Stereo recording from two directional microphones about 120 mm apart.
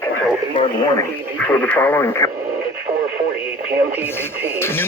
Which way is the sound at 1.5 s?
15° left (ahead or behind).